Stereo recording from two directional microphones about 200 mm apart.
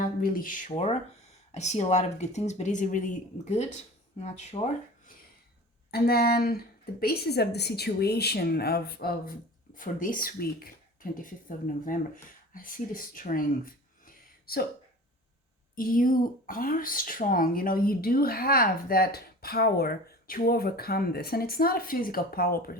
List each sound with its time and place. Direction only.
0.0 s speech: 45° left (ahead or behind)
0.7 s speech: 30° left (ahead or behind)
4.2 s speech: 35° left (ahead or behind)
5.9 s speech: 50° left (ahead or behind)
14.0 s a sound: 45° left (ahead or behind)
15.7 s speech: 45° left (ahead or behind)